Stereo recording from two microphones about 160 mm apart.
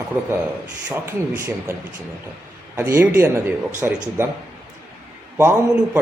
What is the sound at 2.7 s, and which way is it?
A man's voice, 15° right (ahead or behind).